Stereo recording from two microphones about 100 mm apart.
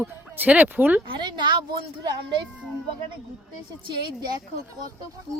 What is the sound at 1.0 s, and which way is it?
Speech, 55° right (ahead or behind).